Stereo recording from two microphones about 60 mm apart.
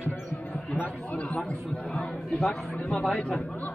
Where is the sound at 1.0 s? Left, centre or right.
Left; by 2.7 s centre.